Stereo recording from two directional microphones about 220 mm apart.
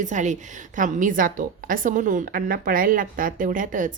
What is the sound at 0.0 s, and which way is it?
A woman's voice, 35° right (ahead or behind).